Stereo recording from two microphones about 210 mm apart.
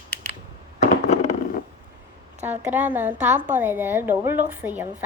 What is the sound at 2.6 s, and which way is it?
A woman's voice, 10° right (ahead or behind).